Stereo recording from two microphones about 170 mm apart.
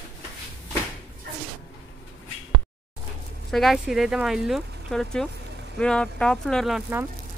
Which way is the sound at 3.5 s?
Centre (ahead or behind).